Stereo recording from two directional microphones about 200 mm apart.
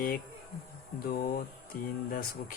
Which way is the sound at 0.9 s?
45° left (ahead or behind).